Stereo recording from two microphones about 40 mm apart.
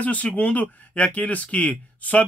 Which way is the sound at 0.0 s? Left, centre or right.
Left.